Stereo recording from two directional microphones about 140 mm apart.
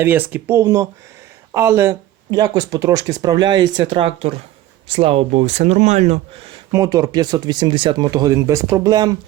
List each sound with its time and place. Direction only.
0.0 s speech: 15° right (ahead or behind); by 6.6 s 45° right (ahead or behind)
6.7 s speech: 25° right (ahead or behind)